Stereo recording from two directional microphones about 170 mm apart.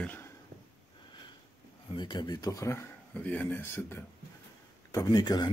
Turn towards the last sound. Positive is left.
turn(degrees=25)  # may be behind; listen again after turning